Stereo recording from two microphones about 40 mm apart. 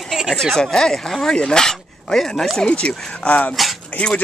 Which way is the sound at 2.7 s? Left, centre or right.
Left.